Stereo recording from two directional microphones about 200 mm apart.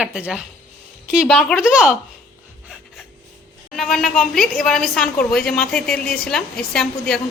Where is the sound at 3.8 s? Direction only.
Centre (ahead or behind).